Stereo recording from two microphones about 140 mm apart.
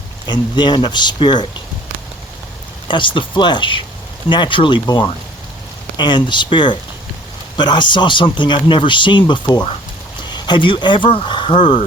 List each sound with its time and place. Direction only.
0.3 s speech: 35° left (ahead or behind)
2.8 s speech: 35° left (ahead or behind)